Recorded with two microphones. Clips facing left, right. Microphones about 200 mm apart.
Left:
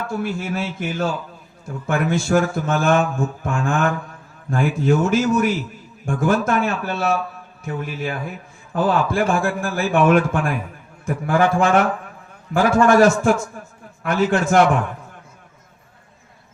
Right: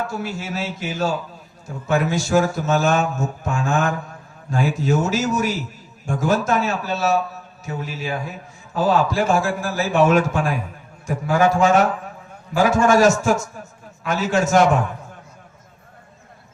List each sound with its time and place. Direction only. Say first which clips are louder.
0.1 s mantra: left 3 dB; 55° left (ahead or behind)
11.0 s a man's voice: even; 55° left (ahead or behind)
12.5 s mantra: left 2 dB; 55° left (ahead or behind)
14.0 s a man's voice: left 2 dB; 55° left (ahead or behind)